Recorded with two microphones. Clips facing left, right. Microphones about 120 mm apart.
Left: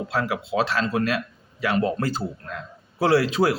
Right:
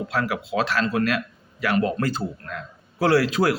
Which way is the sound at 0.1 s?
30° left (ahead or behind).